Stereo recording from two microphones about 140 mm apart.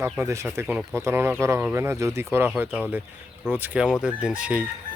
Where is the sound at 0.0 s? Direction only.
20° right (ahead or behind).